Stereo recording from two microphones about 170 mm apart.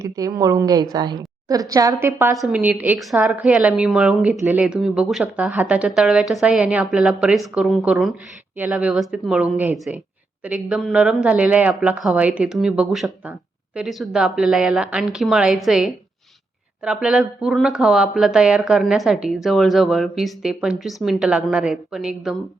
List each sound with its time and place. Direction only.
0.0 s a woman's voice: 20° right (ahead or behind)